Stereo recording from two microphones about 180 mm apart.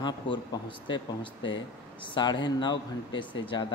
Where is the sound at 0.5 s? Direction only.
25° left (ahead or behind).